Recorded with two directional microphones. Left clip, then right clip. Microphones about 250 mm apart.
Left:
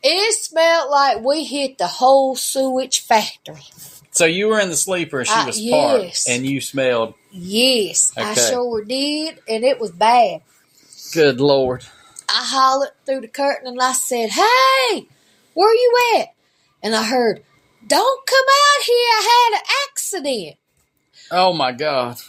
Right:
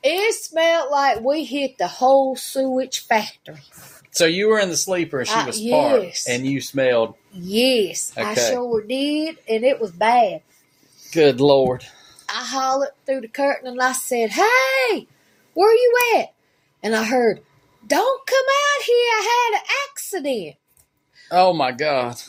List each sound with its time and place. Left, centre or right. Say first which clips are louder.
0.0 s speech: left 2 dB; centre
11.1 s speech: even; centre